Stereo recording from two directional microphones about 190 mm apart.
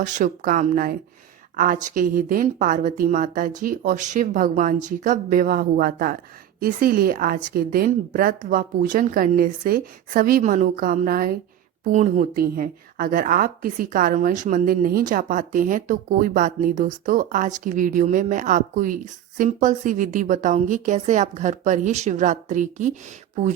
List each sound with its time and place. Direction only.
0.0 s a woman's voice: 40° right (ahead or behind)